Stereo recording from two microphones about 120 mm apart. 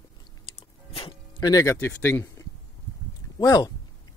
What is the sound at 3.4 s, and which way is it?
Speech, 30° left (ahead or behind).